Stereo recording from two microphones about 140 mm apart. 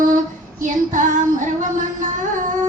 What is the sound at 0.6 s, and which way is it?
Child singing, 65° right (ahead or behind).